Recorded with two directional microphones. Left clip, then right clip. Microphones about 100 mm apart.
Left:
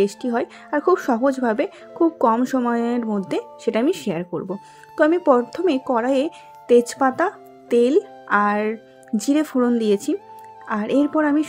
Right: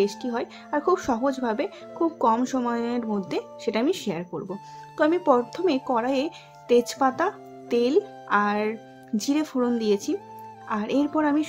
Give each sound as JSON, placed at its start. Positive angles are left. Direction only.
{"t": 0.0, "sound": "speech", "side_deg": 50}